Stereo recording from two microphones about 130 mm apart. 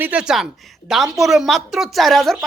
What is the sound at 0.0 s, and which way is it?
A woman's voice, 10° right (ahead or behind).